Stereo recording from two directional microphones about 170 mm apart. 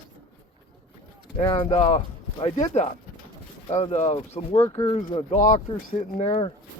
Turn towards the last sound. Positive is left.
turn(degrees=35)  # may be behind; listen again after turning